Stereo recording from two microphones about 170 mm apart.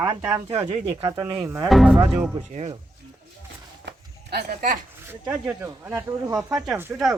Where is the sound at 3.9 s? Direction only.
70° right (ahead or behind); by 4.8 s 55° right (ahead or behind).